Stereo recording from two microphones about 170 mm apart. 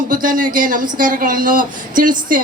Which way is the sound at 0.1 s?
50° right (ahead or behind).